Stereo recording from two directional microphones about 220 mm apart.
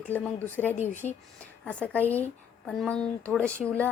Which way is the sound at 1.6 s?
5° left (ahead or behind).